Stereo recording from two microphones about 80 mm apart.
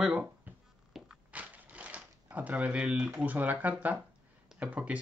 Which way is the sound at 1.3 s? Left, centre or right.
Centre.